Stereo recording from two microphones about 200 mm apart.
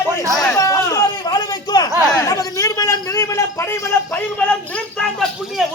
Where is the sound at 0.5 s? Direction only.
15° left (ahead or behind).